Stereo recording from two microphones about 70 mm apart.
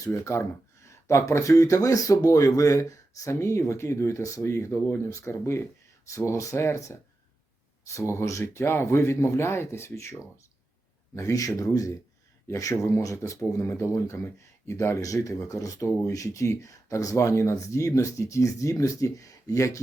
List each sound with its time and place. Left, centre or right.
0.0 s speech: left
8.1 s speech: left